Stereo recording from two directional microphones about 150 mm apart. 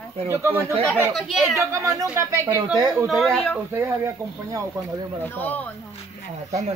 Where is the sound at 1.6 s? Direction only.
20° right (ahead or behind).